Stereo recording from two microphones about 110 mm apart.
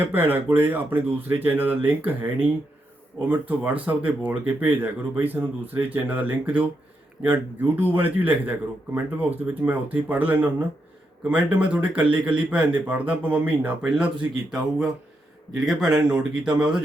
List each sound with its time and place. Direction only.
0.0 s a man's voice: 20° right (ahead or behind)